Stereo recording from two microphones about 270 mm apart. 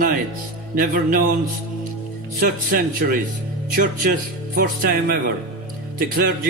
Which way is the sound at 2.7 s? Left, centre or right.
Right.